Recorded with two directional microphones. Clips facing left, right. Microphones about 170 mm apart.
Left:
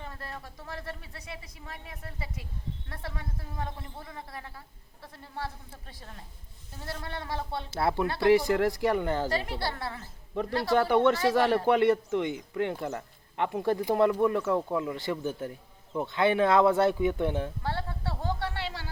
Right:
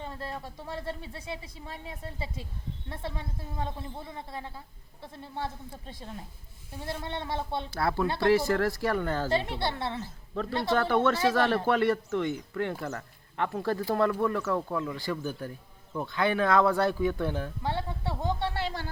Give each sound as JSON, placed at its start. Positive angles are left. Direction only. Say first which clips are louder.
{"t": 0.0, "sound": "speech", "louder": "right 4 dB", "side_deg": -25}
{"t": 7.7, "sound": "speech", "louder": "left 1 dB", "side_deg": 25}
{"t": 9.3, "sound": "speech", "louder": "right 2 dB", "side_deg": -25}
{"t": 10.8, "sound": "speech", "louder": "left 3 dB", "side_deg": 15}
{"t": 17.6, "sound": "music", "louder": "right 2 dB", "side_deg": -15}
{"t": 18.5, "sound": "music", "louder": "right 3 dB", "side_deg": -45}